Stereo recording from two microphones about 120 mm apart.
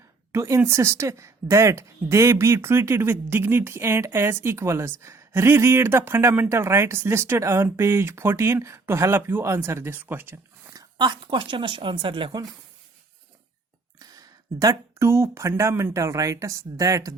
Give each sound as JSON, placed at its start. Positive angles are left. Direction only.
{"t": 0.3, "sound": "speech", "side_deg": -25}
{"t": 10.9, "sound": "speech", "side_deg": -40}
{"t": 14.0, "sound": "speech", "side_deg": -30}